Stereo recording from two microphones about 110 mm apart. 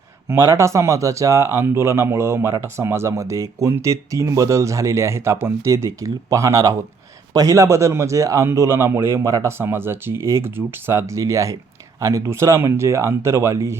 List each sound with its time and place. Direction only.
0.3 s speech: 25° right (ahead or behind)